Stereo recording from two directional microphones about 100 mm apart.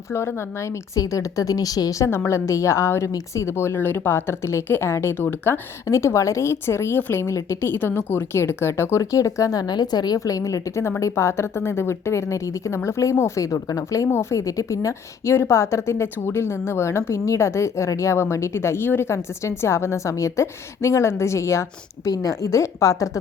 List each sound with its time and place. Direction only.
0.1 s a woman's voice: 25° left (ahead or behind)